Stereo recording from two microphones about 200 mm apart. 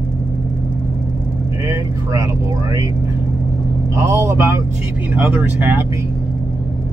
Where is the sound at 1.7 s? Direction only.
20° right (ahead or behind).